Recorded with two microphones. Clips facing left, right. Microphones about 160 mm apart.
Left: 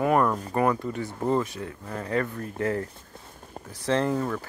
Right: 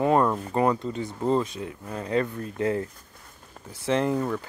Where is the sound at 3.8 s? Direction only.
15° right (ahead or behind).